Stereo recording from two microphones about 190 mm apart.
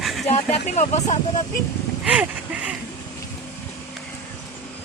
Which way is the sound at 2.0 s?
5° right (ahead or behind).